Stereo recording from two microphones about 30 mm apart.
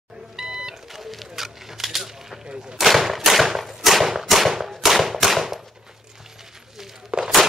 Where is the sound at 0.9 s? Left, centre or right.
Centre.